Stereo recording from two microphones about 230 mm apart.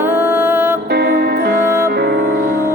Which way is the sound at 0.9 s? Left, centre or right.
Right.